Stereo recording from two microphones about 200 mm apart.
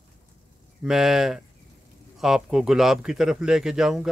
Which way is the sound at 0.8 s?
Centre (ahead or behind).